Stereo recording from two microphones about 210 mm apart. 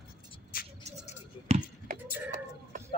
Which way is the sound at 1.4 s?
30° right (ahead or behind).